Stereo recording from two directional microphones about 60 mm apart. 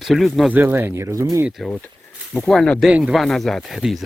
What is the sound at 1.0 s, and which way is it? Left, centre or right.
Speech, right.